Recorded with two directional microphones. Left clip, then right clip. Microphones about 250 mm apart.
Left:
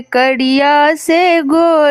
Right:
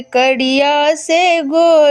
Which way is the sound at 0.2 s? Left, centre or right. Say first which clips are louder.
Even; left.